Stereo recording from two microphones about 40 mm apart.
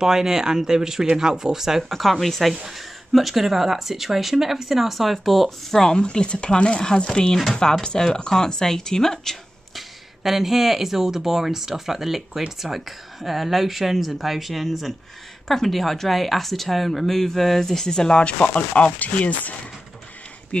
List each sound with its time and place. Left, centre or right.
0.0 s speech: centre
1.9 s speech: centre
5.9 s speech: left
9.8 s speech: centre
18.2 s speech: left